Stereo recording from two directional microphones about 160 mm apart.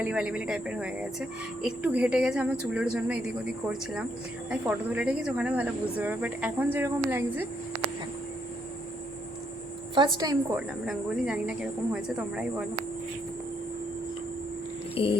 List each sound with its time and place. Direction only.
0.0 s speech: 5° right (ahead or behind)
9.9 s a woman's voice: 30° right (ahead or behind)
10.8 s a woman's voice: 5° right (ahead or behind)
15.0 s music: 35° left (ahead or behind)